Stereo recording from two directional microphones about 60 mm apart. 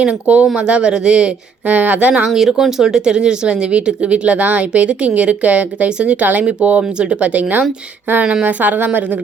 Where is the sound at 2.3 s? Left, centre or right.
Centre.